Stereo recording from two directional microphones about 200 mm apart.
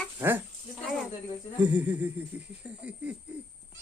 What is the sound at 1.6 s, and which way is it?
Laughter, 10° right (ahead or behind).